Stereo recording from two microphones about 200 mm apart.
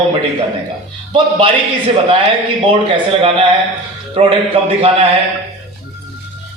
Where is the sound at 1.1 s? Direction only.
25° right (ahead or behind).